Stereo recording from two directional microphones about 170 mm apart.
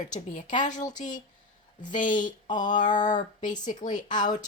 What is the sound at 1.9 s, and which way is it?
Speech, 50° left (ahead or behind).